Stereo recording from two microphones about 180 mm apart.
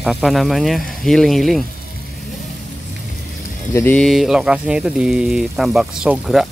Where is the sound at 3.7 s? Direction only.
10° left (ahead or behind).